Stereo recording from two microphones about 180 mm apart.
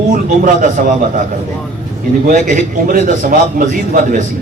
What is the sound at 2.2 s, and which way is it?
A man's voice, 45° right (ahead or behind).